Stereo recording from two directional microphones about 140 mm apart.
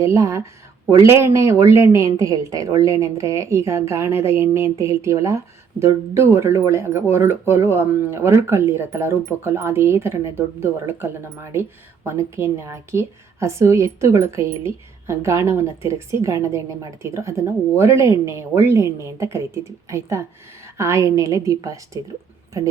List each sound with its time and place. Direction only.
0.0 s a woman's voice: 20° right (ahead or behind)